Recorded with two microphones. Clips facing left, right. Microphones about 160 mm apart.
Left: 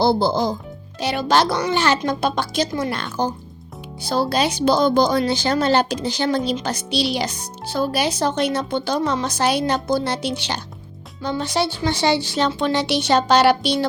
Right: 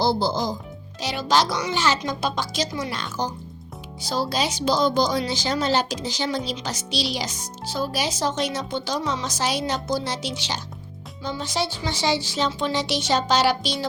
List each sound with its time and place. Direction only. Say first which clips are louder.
0.0 s speech: left 5 dB; 55° left (ahead or behind)